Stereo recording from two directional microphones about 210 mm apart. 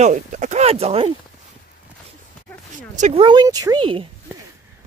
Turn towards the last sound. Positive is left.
turn(degrees=-25)  # may be behind; listen again after turning